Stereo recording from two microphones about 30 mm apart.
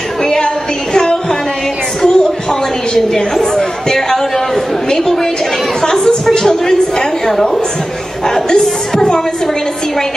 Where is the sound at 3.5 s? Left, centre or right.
Centre.